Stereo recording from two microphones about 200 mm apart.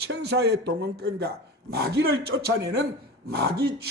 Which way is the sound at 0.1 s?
55° right (ahead or behind).